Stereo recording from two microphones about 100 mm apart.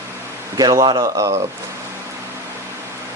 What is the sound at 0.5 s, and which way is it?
Speech, 45° right (ahead or behind).